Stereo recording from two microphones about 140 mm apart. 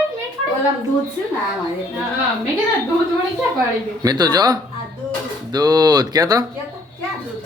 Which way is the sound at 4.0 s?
30° right (ahead or behind).